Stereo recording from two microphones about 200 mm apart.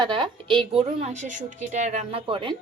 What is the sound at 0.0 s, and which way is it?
A woman's voice, 25° right (ahead or behind).